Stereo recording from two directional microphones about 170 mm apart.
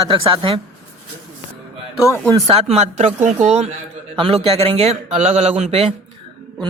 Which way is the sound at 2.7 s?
40° right (ahead or behind).